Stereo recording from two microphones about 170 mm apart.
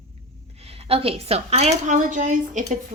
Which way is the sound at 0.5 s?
35° right (ahead or behind).